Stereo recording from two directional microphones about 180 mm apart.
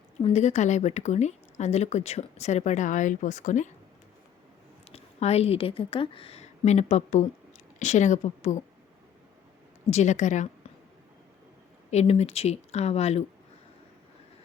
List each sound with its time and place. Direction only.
0.2 s speech: 35° left (ahead or behind)
4.9 s a woman's voice: 35° left (ahead or behind)
9.9 s speech: 40° left (ahead or behind)
11.9 s speech: 35° left (ahead or behind)